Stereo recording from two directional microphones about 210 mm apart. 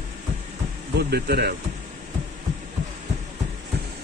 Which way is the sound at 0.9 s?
50° right (ahead or behind).